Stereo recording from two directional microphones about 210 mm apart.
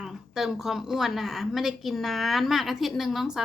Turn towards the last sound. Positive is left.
turn(degrees=0)  # may be behind; listen again after turning